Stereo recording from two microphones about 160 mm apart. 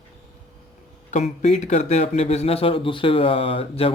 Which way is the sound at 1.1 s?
45° left (ahead or behind).